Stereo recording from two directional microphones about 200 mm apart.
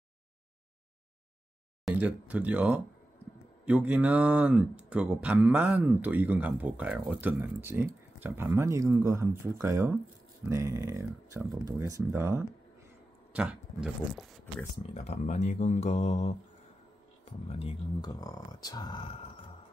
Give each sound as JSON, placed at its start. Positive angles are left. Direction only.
{"t": 1.9, "sound": "speech", "side_deg": -5}
{"t": 15.0, "sound": "speech", "side_deg": 35}
{"t": 17.2, "sound": "music", "side_deg": 30}